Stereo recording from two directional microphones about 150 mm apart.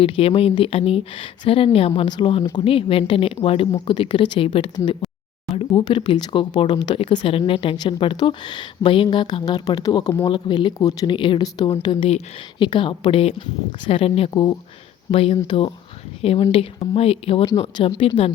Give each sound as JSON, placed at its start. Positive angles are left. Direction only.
{"t": 0.0, "sound": "speech", "side_deg": 40}